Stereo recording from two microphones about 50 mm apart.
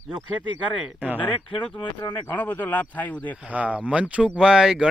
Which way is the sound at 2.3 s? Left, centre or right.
Left.